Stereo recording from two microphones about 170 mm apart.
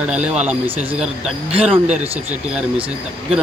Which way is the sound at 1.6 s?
10° right (ahead or behind).